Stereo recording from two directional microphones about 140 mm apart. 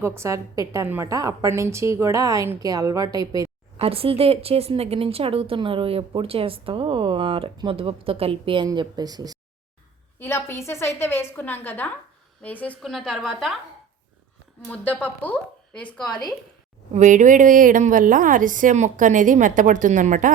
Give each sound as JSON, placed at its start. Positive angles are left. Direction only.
{"t": 0.0, "sound": "a woman's voice", "side_deg": -20}
{"t": 3.8, "sound": "speech", "side_deg": -45}
{"t": 10.2, "sound": "a woman's voice", "side_deg": 15}
{"t": 14.7, "sound": "a woman's voice", "side_deg": 10}
{"t": 16.9, "sound": "a woman's voice", "side_deg": -65}